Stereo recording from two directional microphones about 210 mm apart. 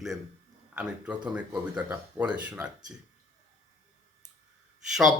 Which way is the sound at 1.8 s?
5° right (ahead or behind).